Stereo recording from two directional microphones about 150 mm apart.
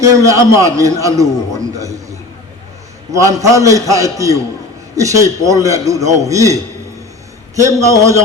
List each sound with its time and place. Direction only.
0.3 s a man's voice: 20° right (ahead or behind)